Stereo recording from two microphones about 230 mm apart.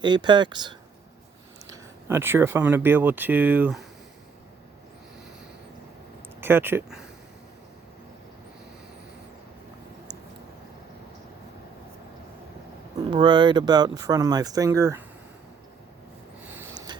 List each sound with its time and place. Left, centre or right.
0.0 s speech: centre
6.4 s speech: centre
13.0 s speech: centre
16.4 s a sound: centre